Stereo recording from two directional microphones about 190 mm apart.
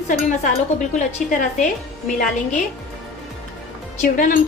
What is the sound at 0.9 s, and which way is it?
Speech, 40° left (ahead or behind).